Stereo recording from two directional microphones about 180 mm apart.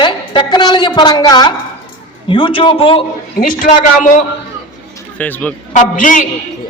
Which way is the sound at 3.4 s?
50° left (ahead or behind).